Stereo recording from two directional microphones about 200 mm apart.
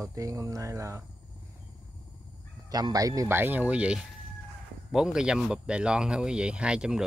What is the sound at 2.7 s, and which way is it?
Speech, 20° right (ahead or behind).